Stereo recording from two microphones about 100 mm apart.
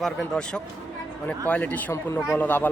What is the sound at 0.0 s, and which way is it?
Speech, 10° left (ahead or behind).